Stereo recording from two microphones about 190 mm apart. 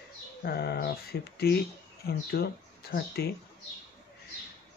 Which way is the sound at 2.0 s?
55° left (ahead or behind).